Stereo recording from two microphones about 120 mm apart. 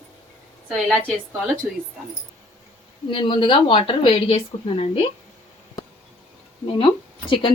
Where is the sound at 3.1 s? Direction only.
45° left (ahead or behind).